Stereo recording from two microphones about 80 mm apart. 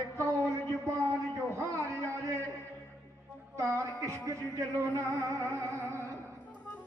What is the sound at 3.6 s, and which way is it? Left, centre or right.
Music, right.